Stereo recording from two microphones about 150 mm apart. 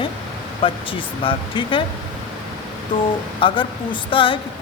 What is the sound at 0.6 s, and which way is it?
Speech, 35° left (ahead or behind).